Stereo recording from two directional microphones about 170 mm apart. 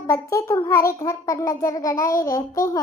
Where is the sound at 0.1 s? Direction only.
20° left (ahead or behind).